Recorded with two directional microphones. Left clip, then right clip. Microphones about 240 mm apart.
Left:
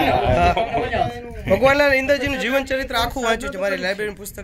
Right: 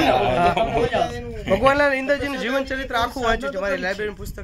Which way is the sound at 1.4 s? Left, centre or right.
Left.